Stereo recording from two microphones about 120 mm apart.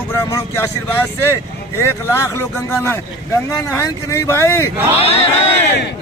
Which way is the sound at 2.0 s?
20° left (ahead or behind).